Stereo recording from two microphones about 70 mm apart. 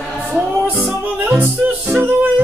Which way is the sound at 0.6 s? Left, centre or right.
Centre.